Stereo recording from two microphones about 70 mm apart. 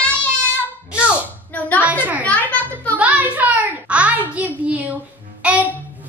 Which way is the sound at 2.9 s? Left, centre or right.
Right.